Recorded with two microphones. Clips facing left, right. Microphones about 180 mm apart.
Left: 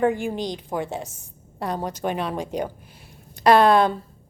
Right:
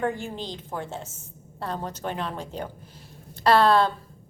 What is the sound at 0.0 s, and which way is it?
A woman's voice, 15° left (ahead or behind).